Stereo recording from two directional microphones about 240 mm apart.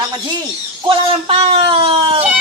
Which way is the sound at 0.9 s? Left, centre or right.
Right.